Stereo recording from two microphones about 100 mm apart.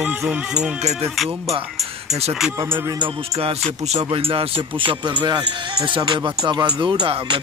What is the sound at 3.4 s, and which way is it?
Speech, 75° right (ahead or behind).